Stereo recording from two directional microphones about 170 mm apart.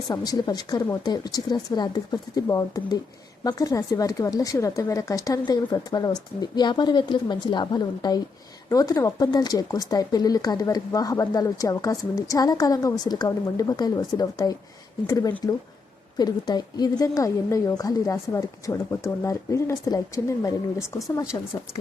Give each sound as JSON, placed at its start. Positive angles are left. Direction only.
{"t": 0.1, "sound": "speech", "side_deg": 25}